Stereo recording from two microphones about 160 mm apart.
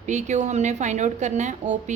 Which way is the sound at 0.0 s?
50° right (ahead or behind).